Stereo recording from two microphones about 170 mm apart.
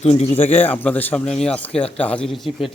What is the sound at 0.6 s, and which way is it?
A man's voice, 10° left (ahead or behind).